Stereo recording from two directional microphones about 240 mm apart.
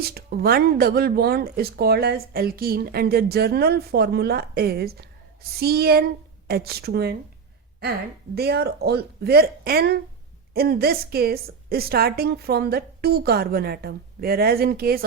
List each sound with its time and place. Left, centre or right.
0.0 s speech: right
8.4 s speech: right